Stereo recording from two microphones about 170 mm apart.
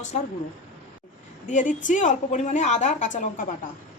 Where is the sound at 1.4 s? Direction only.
45° left (ahead or behind).